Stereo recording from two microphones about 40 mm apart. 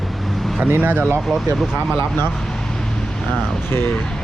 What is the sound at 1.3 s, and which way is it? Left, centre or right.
Speech, right.